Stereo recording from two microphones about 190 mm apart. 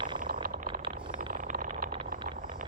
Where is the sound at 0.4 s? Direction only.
50° right (ahead or behind).